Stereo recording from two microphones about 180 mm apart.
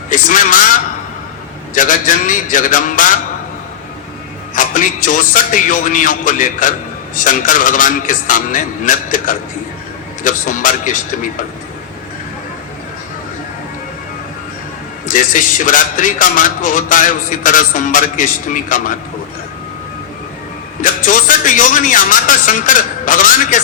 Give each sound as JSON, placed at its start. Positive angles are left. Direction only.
{"t": 0.1, "sound": "a man's voice", "side_deg": 45}
{"t": 1.7, "sound": "a man's voice", "side_deg": 45}
{"t": 4.5, "sound": "a man's voice", "side_deg": 45}
{"t": 15.0, "sound": "a man's voice", "side_deg": 45}
{"t": 20.8, "sound": "a man's voice", "side_deg": 45}